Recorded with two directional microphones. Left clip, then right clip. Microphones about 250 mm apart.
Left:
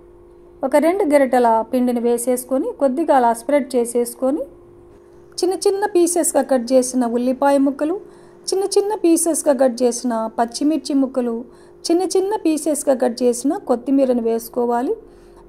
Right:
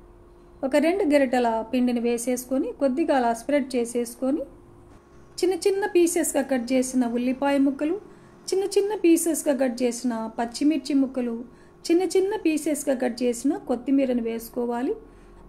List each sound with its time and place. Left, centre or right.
0.6 s a woman's voice: centre
5.4 s a woman's voice: left